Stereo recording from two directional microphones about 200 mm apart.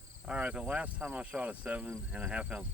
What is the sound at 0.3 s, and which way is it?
Speech, 5° right (ahead or behind).